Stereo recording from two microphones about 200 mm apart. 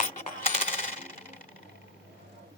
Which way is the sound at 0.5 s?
35° left (ahead or behind).